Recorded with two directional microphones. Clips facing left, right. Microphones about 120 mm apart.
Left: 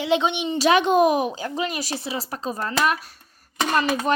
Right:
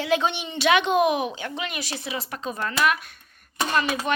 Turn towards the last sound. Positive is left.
turn(degrees=35)  # may be behind; listen again after turning